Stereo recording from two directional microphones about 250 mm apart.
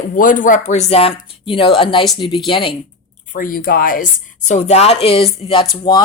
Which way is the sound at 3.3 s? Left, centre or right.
Left.